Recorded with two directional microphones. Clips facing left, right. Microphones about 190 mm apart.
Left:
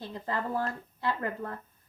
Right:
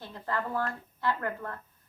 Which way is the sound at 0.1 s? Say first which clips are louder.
Even; 15° left (ahead or behind).